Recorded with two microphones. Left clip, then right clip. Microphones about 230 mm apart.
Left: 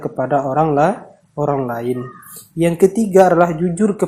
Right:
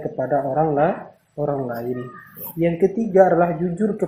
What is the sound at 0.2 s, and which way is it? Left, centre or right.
Speech, left.